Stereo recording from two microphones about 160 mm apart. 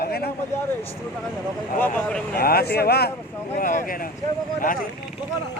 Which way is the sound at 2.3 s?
75° left (ahead or behind).